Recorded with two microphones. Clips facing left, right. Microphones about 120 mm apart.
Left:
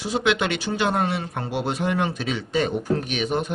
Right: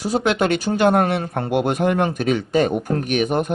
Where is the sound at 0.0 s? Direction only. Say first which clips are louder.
Right 3 dB; 45° right (ahead or behind).